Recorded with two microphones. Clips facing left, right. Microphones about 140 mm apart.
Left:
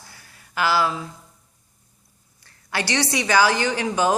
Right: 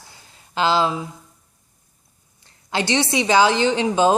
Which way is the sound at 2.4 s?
20° right (ahead or behind).